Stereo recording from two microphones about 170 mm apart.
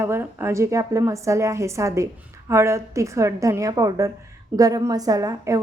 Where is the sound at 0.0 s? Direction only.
15° right (ahead or behind).